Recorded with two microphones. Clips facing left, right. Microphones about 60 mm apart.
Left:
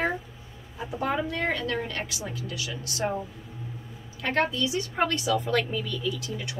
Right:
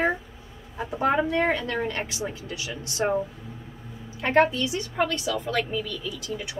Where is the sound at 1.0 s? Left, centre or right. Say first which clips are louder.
Right 6 dB; right.